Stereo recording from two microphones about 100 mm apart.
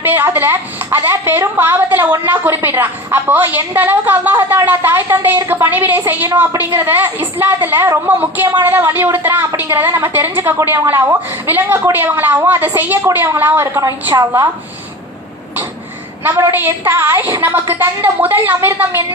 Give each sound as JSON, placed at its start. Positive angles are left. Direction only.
{"t": 0.0, "sound": "a woman's voice", "side_deg": -20}
{"t": 16.5, "sound": "a woman's voice", "side_deg": -20}